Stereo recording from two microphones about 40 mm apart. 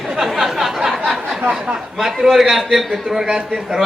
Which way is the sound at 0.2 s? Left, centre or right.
Centre.